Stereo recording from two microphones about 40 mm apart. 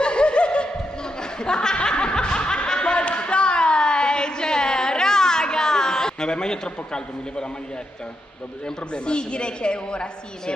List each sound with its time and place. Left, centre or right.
0.0 s snicker: left
1.4 s laughter: centre
8.6 s a woman's voice: left